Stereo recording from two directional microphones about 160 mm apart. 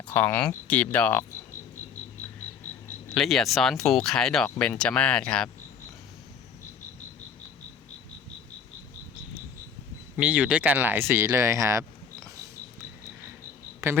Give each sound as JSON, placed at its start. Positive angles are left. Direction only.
{"t": 0.1, "sound": "speech", "side_deg": 10}
{"t": 3.2, "sound": "speech", "side_deg": 0}
{"t": 10.2, "sound": "speech", "side_deg": -5}
{"t": 13.8, "sound": "speech", "side_deg": -20}